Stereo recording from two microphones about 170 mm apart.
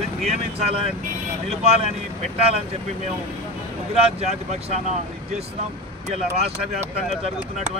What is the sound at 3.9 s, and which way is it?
Speech, 40° right (ahead or behind).